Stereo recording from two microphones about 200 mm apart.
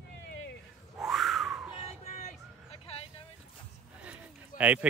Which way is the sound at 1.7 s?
35° left (ahead or behind).